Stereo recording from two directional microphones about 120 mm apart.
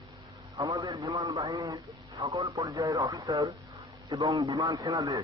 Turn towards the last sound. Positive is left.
turn(degrees=-25)  # may be behind; listen again after turning